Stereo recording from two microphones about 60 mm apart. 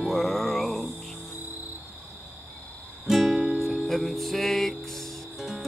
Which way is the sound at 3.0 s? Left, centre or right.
Centre.